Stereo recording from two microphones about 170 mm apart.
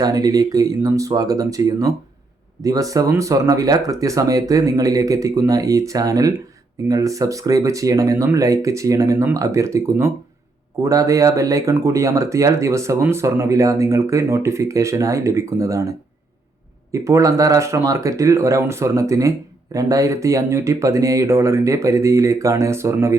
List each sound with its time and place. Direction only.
0.0 s speech: 20° right (ahead or behind)